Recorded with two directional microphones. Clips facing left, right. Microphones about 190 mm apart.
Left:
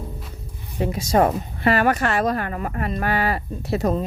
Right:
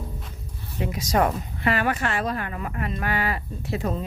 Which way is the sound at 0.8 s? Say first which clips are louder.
Left 4 dB; 30° left (ahead or behind).